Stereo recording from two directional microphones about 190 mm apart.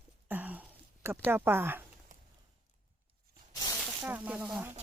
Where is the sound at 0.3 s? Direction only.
10° right (ahead or behind).